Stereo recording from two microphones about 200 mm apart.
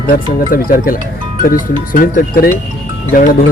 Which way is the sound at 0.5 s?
45° left (ahead or behind).